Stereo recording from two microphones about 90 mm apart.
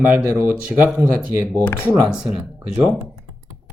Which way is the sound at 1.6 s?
20° left (ahead or behind).